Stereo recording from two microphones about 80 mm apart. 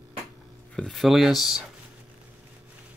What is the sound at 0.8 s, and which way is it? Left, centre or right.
Speech, centre.